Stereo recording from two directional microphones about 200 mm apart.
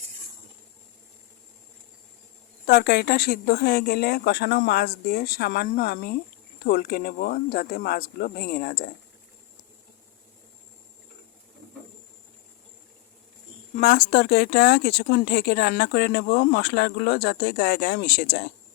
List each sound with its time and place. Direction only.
2.6 s speech: 50° left (ahead or behind)
13.7 s speech: 50° left (ahead or behind)